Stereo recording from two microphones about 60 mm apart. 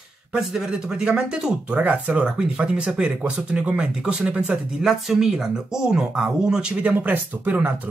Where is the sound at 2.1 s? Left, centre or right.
Centre.